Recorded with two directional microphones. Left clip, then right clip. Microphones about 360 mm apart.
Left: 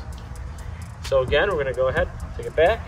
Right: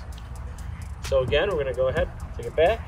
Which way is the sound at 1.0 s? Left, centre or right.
Centre.